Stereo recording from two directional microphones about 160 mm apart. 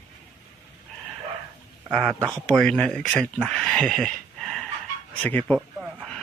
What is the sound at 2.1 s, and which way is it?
Speech, 20° right (ahead or behind).